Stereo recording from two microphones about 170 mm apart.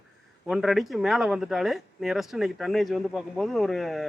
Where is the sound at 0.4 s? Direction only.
Centre (ahead or behind).